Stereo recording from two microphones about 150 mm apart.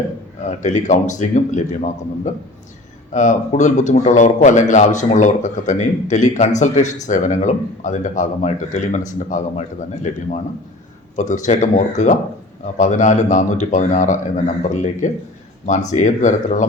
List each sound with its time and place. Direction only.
0.4 s a man's voice: 55° left (ahead or behind)
11.2 s a man's voice: 55° left (ahead or behind)